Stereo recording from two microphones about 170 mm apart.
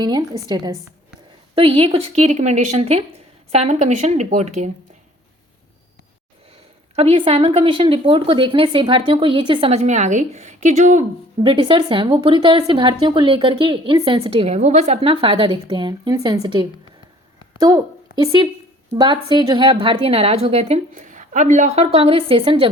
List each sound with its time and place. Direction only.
0.0 s a woman's voice: 25° right (ahead or behind); by 4.7 s 40° right (ahead or behind)
6.9 s a woman's voice: 35° right (ahead or behind)
11.4 s a woman's voice: 30° right (ahead or behind)
18.2 s a woman's voice: 25° right (ahead or behind)